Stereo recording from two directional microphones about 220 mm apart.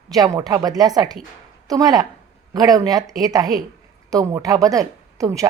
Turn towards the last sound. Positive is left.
turn(degrees=-15)  # may be behind; listen again after turning